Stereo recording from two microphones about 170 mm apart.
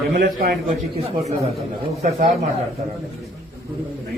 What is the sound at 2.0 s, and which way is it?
Speech, 40° right (ahead or behind).